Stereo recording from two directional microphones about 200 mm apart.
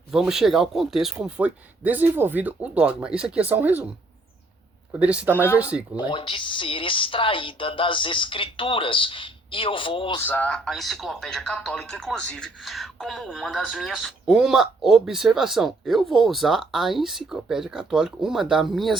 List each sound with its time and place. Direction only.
0.1 s speech: centre (ahead or behind)
4.9 s speech: 5° right (ahead or behind)
5.3 s speech: 10° left (ahead or behind)
6.0 s speech: 25° left (ahead or behind)
10.2 s speech: 10° left (ahead or behind)